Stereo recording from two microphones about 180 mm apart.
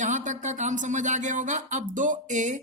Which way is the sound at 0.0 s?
40° right (ahead or behind).